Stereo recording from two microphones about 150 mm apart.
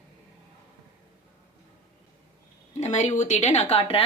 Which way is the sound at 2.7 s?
50° left (ahead or behind).